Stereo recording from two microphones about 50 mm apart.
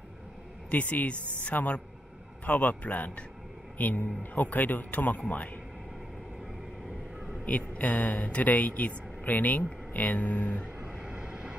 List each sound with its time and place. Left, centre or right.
0.7 s speech: left
1.1 s speech: right
1.4 s a man's voice: left
7.4 s speech: left
10.8 s vehicle: centre